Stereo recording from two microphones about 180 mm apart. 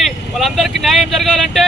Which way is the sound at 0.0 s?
Centre (ahead or behind).